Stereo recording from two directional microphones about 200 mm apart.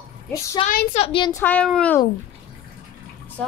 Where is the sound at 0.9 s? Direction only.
30° left (ahead or behind).